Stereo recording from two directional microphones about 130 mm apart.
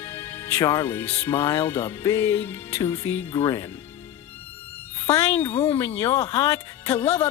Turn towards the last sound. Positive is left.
turn(degrees=45)  # may be behind; listen again after turning